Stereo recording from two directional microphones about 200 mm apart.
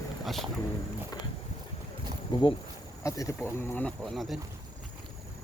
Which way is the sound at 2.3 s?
20° left (ahead or behind).